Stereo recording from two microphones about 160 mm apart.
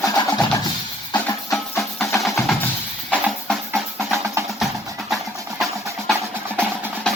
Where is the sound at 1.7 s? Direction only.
15° left (ahead or behind).